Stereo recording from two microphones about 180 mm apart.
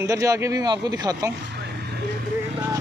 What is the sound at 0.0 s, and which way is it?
Speech, 20° right (ahead or behind).